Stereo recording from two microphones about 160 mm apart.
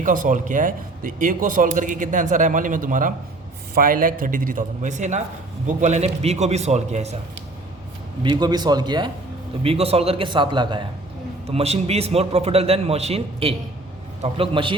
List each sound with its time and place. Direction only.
0.0 s a man's voice: 55° right (ahead or behind)
8.2 s speech: 25° right (ahead or behind)
9.6 s a man's voice: 40° right (ahead or behind)
11.4 s a man's voice: 40° right (ahead or behind)